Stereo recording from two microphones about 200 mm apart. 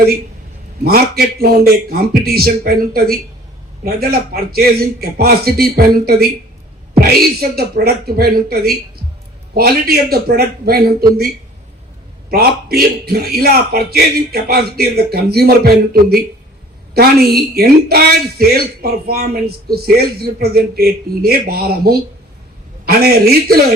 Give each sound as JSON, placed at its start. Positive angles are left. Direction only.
{"t": 0.9, "sound": "speech", "side_deg": -50}
{"t": 12.3, "sound": "speech", "side_deg": -50}